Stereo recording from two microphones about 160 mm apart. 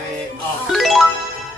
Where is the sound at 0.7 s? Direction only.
Centre (ahead or behind).